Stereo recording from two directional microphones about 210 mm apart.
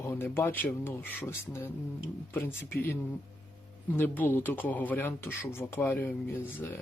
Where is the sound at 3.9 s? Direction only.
10° left (ahead or behind).